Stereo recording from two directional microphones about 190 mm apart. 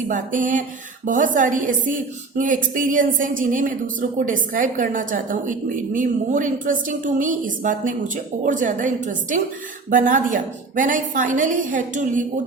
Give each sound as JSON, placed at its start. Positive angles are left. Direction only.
{"t": 0.1, "sound": "a woman's voice", "side_deg": -45}